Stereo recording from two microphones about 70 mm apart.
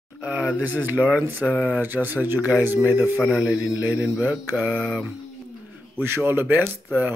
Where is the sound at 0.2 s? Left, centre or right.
Right.